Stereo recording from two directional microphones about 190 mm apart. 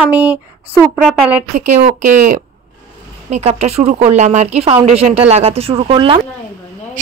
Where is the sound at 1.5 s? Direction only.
40° right (ahead or behind).